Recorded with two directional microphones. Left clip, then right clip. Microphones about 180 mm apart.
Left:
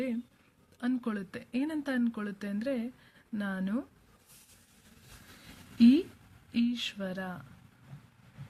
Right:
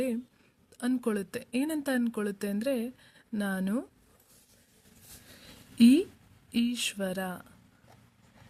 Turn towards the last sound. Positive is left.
turn(degrees=-45)  # may be behind; listen again after turning